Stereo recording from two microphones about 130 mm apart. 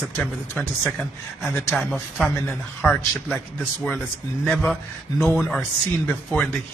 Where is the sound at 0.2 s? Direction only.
10° left (ahead or behind).